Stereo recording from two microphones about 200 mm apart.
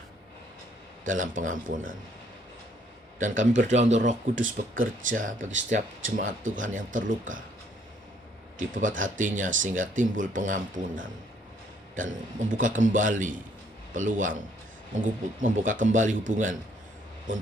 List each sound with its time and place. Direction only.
1.0 s speech: 40° right (ahead or behind)
3.2 s speech: 40° right (ahead or behind)
8.5 s speech: 40° right (ahead or behind)